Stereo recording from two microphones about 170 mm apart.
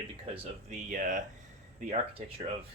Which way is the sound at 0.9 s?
50° right (ahead or behind).